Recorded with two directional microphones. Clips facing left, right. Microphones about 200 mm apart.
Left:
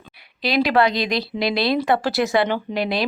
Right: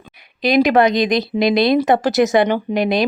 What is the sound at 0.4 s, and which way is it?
A woman's voice, 20° right (ahead or behind).